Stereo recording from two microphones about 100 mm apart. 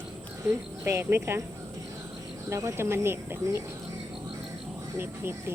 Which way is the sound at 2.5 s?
30° right (ahead or behind).